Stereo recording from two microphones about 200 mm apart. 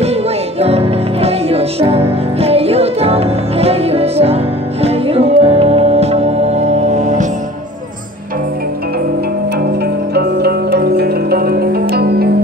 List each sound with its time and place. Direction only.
0.0 s music: 30° right (ahead or behind)
10.1 s music: 55° right (ahead or behind)